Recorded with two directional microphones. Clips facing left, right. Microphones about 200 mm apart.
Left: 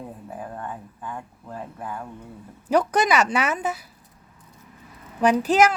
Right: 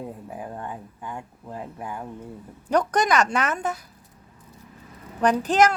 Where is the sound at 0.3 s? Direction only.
15° right (ahead or behind).